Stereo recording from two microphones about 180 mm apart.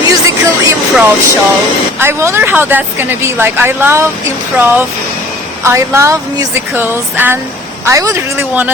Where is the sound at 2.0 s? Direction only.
15° right (ahead or behind).